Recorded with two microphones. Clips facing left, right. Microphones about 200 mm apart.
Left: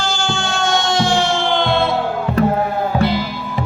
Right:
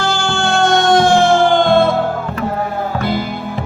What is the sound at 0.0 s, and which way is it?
Music, 60° right (ahead or behind).